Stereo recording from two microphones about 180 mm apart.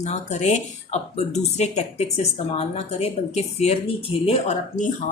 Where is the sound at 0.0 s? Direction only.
40° left (ahead or behind).